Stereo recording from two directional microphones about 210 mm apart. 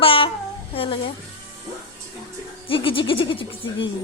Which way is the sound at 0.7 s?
25° left (ahead or behind).